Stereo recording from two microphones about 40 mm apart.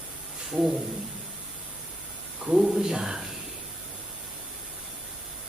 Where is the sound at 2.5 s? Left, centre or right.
Centre.